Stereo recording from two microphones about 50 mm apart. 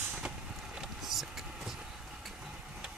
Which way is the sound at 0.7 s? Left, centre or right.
Centre.